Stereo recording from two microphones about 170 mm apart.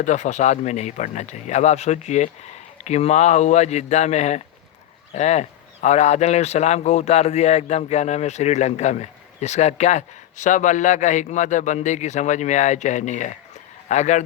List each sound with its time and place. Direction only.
0.0 s speech: 45° left (ahead or behind)